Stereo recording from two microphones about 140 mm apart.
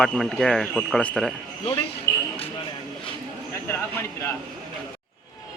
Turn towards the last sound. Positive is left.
turn(degrees=15)  # may be behind; listen again after turning